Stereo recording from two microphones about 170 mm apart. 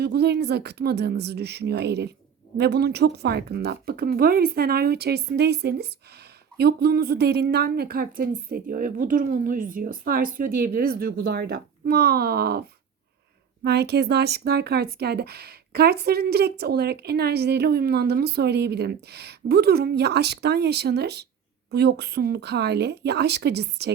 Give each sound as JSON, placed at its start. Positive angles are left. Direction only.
{"t": 0.0, "sound": "speech", "side_deg": -75}
{"t": 13.7, "sound": "speech", "side_deg": -75}